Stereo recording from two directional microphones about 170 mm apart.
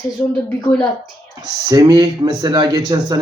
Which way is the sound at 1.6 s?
20° right (ahead or behind).